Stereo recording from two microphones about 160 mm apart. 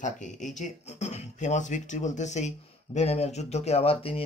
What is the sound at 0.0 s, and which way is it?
Speech, 50° left (ahead or behind).